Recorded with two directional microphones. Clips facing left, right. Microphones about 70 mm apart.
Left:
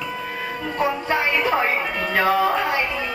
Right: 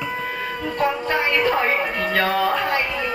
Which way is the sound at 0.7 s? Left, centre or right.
Centre.